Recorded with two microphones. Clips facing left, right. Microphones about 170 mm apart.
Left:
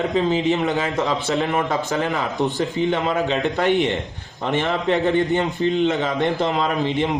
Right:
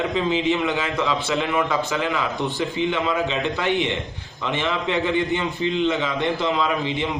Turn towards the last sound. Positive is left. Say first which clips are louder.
# left 2 dB
turn(degrees=45)  # may be behind; listen again after turning